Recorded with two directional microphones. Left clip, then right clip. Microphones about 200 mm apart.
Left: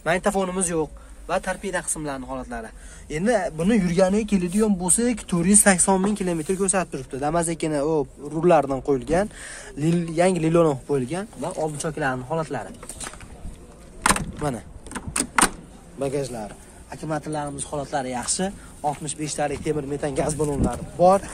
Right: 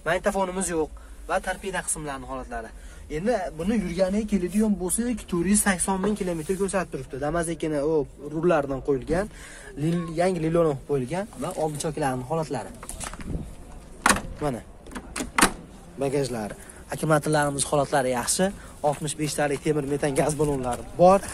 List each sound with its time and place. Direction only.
0.0 s speech: 20° left (ahead or behind)
3.1 s speech: 40° left (ahead or behind); by 11.1 s 20° left (ahead or behind)
11.1 s speech: centre (ahead or behind)
11.8 s speech: 10° right (ahead or behind)
14.9 s typewriter: 50° left (ahead or behind)
16.2 s a man's voice: 25° right (ahead or behind)
16.9 s speech: 50° right (ahead or behind)
17.7 s speech: 35° right (ahead or behind); by 21.2 s centre (ahead or behind)